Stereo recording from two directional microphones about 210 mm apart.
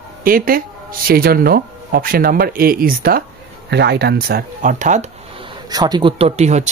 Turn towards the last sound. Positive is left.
turn(degrees=-30)  # may be behind; listen again after turning